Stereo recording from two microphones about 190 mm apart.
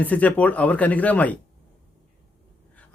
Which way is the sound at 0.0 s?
5° left (ahead or behind).